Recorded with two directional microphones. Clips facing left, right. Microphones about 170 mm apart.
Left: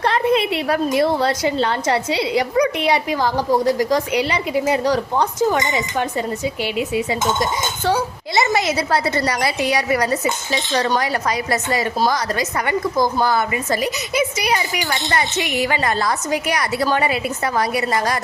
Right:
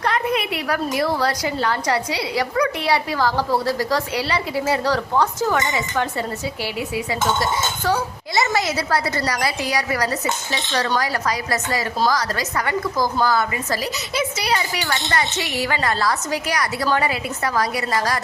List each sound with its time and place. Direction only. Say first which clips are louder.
0.0 s a woman's voice: left 4 dB; 30° left (ahead or behind)